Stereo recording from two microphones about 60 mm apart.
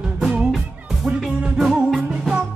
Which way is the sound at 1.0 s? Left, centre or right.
Centre.